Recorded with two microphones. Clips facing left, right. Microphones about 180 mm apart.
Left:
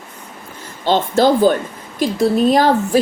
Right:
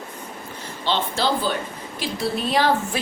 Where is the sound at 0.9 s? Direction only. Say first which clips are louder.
Left 9 dB; 45° left (ahead or behind).